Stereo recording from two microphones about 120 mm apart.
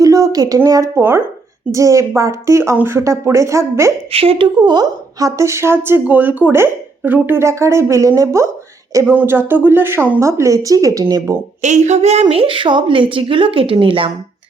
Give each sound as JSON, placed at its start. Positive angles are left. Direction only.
{"t": 0.0, "sound": "a woman's voice", "side_deg": -30}
{"t": 4.1, "sound": "a woman's voice", "side_deg": -50}
{"t": 8.9, "sound": "a sound", "side_deg": -25}
{"t": 9.1, "sound": "a woman's voice", "side_deg": -20}
{"t": 11.6, "sound": "a woman's voice", "side_deg": -75}